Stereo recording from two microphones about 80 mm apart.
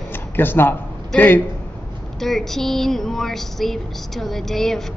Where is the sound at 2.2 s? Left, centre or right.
Centre.